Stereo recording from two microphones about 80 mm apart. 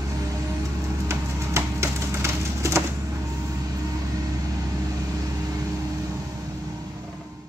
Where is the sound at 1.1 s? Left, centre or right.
Right.